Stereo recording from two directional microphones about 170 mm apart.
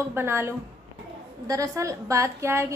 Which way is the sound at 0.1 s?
15° right (ahead or behind).